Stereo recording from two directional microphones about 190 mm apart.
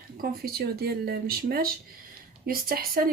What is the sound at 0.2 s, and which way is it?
Speech, 55° right (ahead or behind).